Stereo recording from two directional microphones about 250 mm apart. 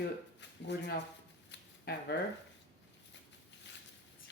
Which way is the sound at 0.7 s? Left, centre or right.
Left.